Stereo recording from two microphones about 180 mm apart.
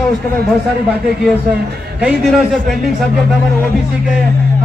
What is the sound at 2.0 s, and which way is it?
Speech, 5° right (ahead or behind).